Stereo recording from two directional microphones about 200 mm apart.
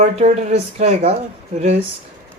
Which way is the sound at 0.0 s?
35° right (ahead or behind).